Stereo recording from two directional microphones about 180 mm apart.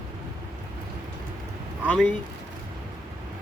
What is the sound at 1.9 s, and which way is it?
Speech, 5° left (ahead or behind).